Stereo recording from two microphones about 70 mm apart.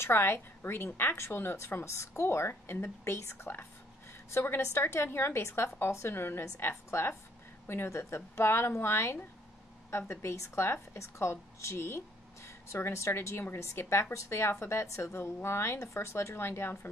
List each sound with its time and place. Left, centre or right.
0.0 s a woman's voice: left